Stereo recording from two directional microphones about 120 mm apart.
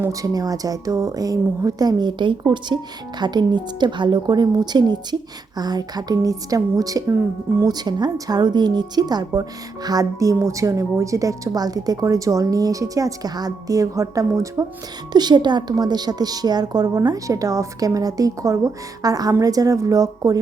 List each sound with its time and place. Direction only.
0.0 s a woman's voice: 30° right (ahead or behind)
7.7 s speech: 35° right (ahead or behind)
15.1 s a woman's voice: 35° right (ahead or behind)